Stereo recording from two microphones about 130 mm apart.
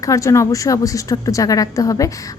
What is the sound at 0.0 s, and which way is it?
A woman's voice, 25° left (ahead or behind).